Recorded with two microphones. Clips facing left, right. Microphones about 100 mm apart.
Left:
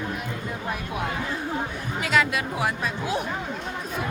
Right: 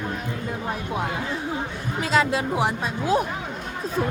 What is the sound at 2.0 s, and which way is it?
Speech, 30° right (ahead or behind).